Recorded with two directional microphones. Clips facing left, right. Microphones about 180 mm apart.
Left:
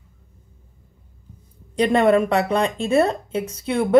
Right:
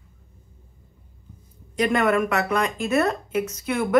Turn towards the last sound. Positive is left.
turn(degrees=30)  # may be behind; listen again after turning